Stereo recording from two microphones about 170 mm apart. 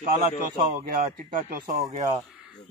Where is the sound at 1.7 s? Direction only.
20° right (ahead or behind).